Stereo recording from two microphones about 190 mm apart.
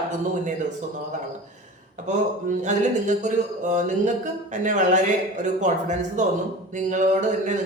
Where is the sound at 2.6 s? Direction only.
40° right (ahead or behind).